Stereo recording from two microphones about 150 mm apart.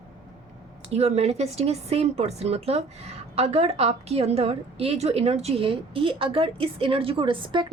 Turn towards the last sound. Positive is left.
turn(degrees=-35)  # may be behind; listen again after turning